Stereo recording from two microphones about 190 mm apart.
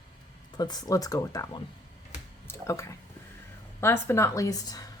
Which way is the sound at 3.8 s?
10° left (ahead or behind).